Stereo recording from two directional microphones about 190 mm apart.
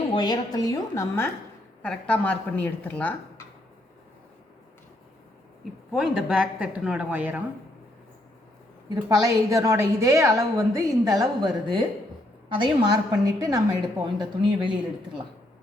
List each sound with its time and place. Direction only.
0.1 s a woman's voice: 20° left (ahead or behind)
5.9 s speech: 5° right (ahead or behind)
9.0 s a woman's voice: 15° right (ahead or behind)